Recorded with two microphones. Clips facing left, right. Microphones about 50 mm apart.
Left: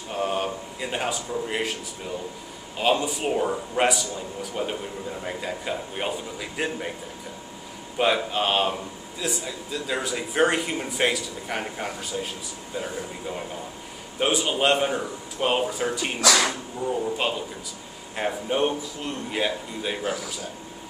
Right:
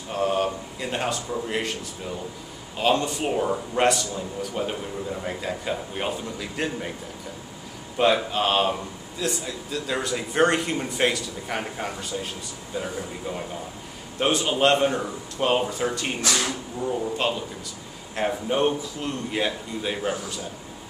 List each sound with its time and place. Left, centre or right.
0.1 s a sound: centre
1.5 s speech: centre
2.8 s speech: centre
8.0 s speech: centre
14.2 s speech: centre
16.2 s speech: left
17.0 s a man's voice: centre